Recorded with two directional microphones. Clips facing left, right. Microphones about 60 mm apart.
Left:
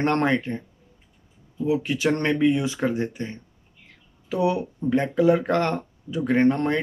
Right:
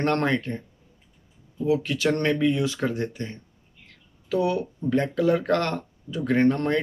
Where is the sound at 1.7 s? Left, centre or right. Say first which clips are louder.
Even; centre.